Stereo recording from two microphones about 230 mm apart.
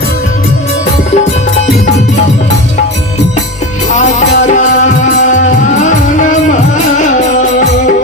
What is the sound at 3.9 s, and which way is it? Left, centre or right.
Music, left.